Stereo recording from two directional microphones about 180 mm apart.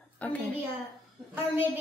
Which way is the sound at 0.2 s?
10° left (ahead or behind).